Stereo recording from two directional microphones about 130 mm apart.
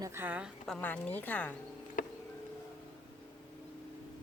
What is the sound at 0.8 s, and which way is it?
Speech, 15° left (ahead or behind).